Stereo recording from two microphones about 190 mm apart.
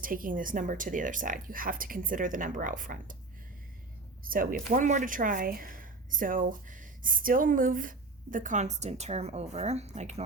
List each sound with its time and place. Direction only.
0.0 s speech: 45° right (ahead or behind)
4.2 s speech: 50° right (ahead or behind)